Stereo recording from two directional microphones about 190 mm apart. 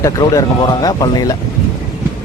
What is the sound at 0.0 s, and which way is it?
Speech, 20° left (ahead or behind).